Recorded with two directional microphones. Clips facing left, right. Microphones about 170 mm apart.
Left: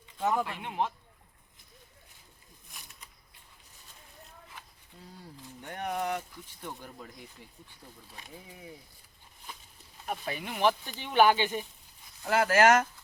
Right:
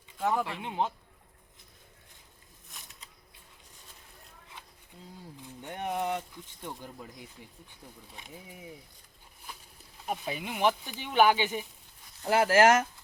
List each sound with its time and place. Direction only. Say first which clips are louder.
0.2 s speech: even; centre (ahead or behind)
0.6 s speech: right 1 dB; 25° right (ahead or behind)
5.6 s speech: right 1 dB; 15° right (ahead or behind)
8.1 s speech: even; 15° right (ahead or behind)
10.1 s speech: right 1 dB; 10° right (ahead or behind)
12.2 s speech: right 1 dB; 30° right (ahead or behind)